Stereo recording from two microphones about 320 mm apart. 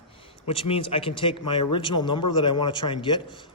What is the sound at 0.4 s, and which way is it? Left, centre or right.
A man's voice, centre.